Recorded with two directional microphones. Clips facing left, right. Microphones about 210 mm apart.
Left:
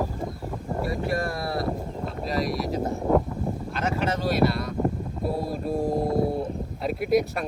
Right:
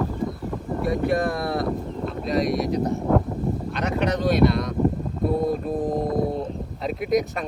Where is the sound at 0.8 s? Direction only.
Centre (ahead or behind).